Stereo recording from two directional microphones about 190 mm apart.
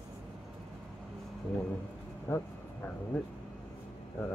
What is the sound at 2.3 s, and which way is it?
Speech, 15° left (ahead or behind).